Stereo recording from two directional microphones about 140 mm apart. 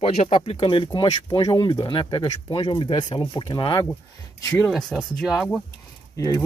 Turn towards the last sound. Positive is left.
turn(degrees=25)  # may be behind; listen again after turning